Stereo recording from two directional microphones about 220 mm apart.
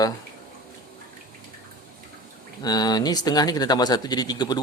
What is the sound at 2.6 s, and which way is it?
Speech, 20° left (ahead or behind).